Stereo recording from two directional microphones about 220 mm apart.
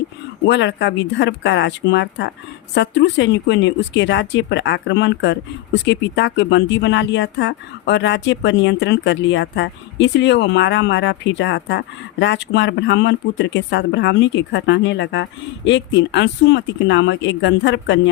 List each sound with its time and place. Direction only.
0.4 s speech: 55° left (ahead or behind)